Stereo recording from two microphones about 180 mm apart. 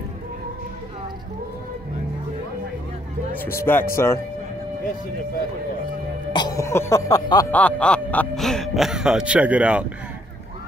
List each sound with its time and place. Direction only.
3.3 s speech: 10° left (ahead or behind)
6.3 s music: 20° left (ahead or behind)
7.5 s speech: 5° left (ahead or behind)